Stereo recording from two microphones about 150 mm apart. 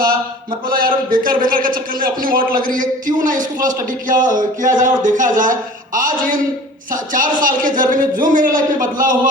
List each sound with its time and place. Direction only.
0.7 s a man's voice: 70° right (ahead or behind)